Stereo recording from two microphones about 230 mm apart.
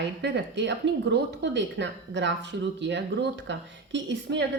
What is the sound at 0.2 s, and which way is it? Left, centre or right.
A woman's voice, right.